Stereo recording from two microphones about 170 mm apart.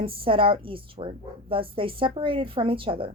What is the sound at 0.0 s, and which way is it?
A woman's voice, 30° right (ahead or behind).